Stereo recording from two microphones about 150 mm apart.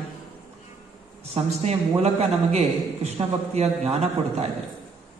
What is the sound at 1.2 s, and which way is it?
A man's voice, 45° right (ahead or behind).